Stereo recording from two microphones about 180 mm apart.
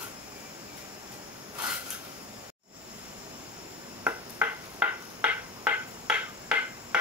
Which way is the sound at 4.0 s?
10° right (ahead or behind).